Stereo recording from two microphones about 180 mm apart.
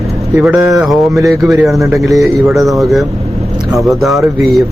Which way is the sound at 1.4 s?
Centre (ahead or behind).